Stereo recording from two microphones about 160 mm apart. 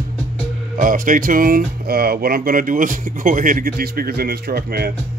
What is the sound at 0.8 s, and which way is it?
Speech, 55° right (ahead or behind).